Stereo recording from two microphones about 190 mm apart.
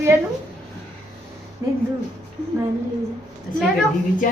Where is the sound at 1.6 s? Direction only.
20° right (ahead or behind).